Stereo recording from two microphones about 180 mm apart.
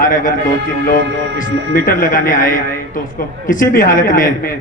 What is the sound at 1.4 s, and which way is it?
A man's voice, 50° left (ahead or behind).